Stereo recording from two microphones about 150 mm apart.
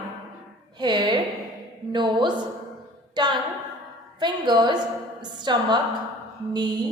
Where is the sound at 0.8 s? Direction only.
30° right (ahead or behind).